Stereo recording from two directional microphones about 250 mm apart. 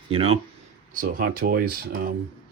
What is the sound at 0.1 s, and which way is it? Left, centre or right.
Speech, right.